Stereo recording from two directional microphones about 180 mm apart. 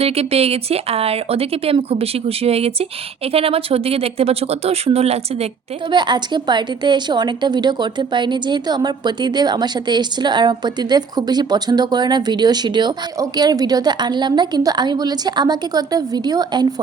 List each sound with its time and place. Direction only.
0.0 s speech: 35° right (ahead or behind)
5.9 s speech: 25° right (ahead or behind)